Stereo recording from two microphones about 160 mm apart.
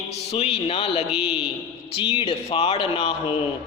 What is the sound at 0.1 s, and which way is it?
A man's voice, 40° left (ahead or behind).